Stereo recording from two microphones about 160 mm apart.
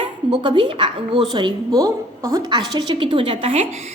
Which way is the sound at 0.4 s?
30° right (ahead or behind).